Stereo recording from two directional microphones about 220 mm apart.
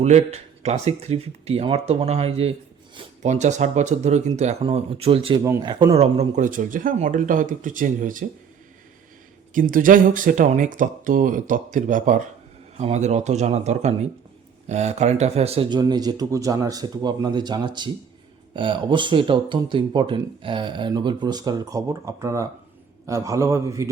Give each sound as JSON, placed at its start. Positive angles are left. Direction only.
{"t": 0.0, "sound": "speech", "side_deg": -30}
{"t": 5.4, "sound": "speech", "side_deg": -15}
{"t": 9.5, "sound": "a man's voice", "side_deg": -40}